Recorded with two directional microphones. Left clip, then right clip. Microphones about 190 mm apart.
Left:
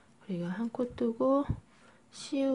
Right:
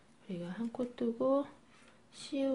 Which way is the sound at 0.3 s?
25° left (ahead or behind).